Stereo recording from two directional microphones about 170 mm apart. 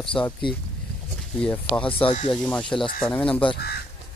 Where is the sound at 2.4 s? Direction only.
5° left (ahead or behind).